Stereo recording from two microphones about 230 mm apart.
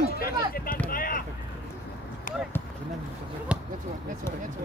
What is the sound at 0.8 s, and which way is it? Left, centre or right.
Vehicle, left.